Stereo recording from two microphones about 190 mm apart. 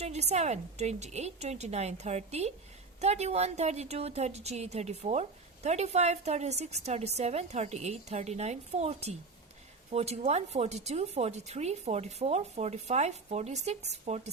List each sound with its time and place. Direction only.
0.0 s a woman's voice: 35° right (ahead or behind)